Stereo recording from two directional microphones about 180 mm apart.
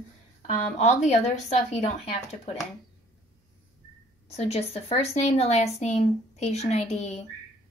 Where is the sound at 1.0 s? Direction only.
40° left (ahead or behind).